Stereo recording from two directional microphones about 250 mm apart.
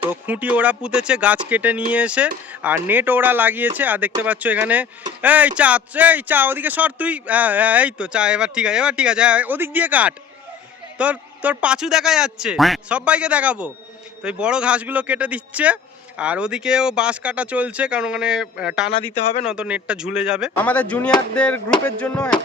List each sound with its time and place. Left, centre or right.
0.1 s speech: centre